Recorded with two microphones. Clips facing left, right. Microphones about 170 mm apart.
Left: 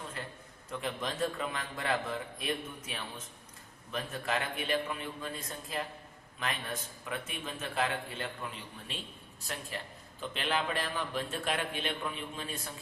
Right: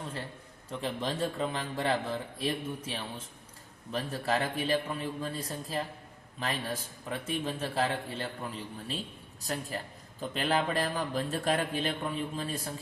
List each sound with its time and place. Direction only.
0.7 s a man's voice: 30° right (ahead or behind)